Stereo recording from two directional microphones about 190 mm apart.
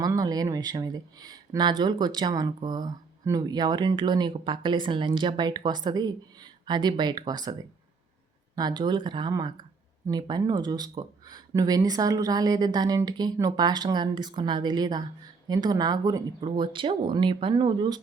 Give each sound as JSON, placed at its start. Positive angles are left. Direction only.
{"t": 0.0, "sound": "speech", "side_deg": -20}